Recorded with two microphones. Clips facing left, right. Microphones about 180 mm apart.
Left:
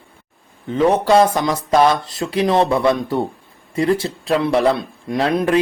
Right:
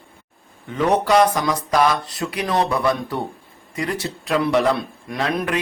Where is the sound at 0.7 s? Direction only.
30° left (ahead or behind).